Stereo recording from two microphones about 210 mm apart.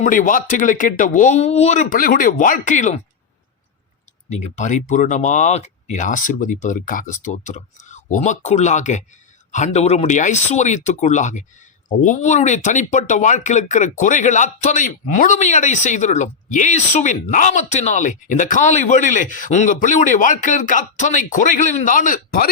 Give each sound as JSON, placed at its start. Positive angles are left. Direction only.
{"t": 0.0, "sound": "speech", "side_deg": 40}
{"t": 4.5, "sound": "speech", "side_deg": 35}